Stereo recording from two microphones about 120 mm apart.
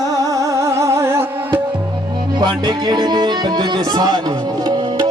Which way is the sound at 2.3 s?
35° right (ahead or behind).